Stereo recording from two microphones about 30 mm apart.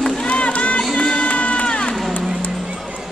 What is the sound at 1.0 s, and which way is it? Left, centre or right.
Crowd, left.